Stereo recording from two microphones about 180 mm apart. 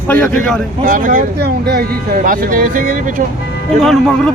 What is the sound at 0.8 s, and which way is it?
Speech, 50° right (ahead or behind).